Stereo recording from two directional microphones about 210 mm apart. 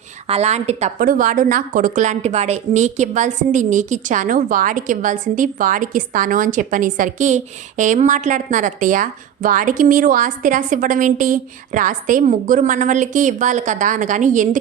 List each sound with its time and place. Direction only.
0.3 s a woman's voice: 30° right (ahead or behind)